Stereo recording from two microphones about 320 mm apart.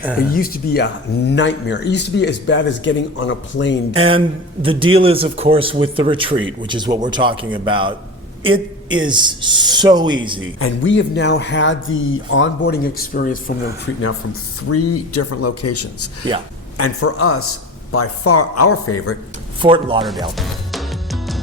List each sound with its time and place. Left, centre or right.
0.3 s speech: left
3.9 s a man's voice: centre
10.6 s speech: left
14.7 s speech: left
19.6 s a man's voice: centre
20.3 s music: centre